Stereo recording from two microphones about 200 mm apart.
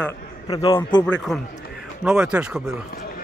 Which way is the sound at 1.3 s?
Centre (ahead or behind).